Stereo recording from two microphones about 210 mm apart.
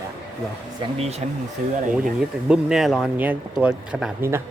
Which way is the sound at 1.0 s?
30° right (ahead or behind).